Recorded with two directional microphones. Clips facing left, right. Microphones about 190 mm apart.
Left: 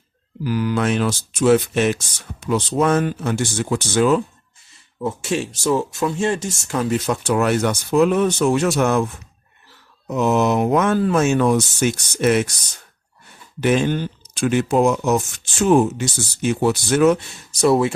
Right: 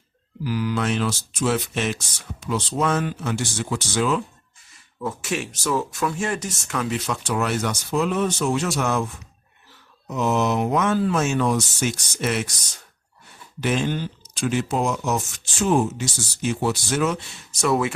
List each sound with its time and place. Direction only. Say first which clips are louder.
0.4 s speech: left 4 dB; 50° left (ahead or behind)
4.9 s speech: left 4 dB; 25° left (ahead or behind)
6.9 s speech: left 6 dB; 50° left (ahead or behind)
10.1 s speech: left 4 dB; 55° left (ahead or behind)
13.6 s speech: left 5 dB; 55° left (ahead or behind)
17.5 s speech: left 5 dB; 35° left (ahead or behind)